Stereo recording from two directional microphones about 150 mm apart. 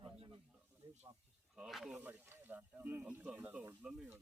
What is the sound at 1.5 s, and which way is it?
Speech, centre (ahead or behind).